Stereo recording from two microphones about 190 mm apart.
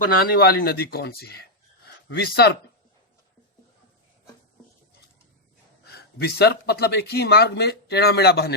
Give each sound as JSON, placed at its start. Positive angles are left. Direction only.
{"t": 0.3, "sound": "a man's voice", "side_deg": 55}
{"t": 5.8, "sound": "a man's voice", "side_deg": 55}